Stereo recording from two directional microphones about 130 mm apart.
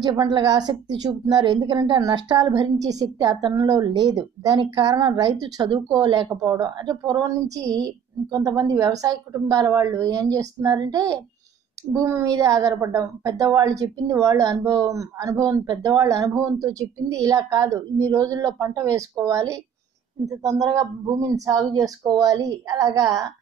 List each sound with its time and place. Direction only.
0.0 s a woman's voice: 35° right (ahead or behind)